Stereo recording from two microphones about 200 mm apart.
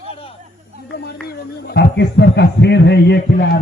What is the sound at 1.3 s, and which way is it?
Speech, 55° left (ahead or behind).